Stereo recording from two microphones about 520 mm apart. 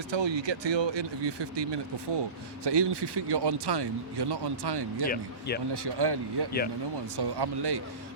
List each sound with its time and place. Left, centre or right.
0.1 s speech: right
5.0 s speech: centre
5.7 s speech: right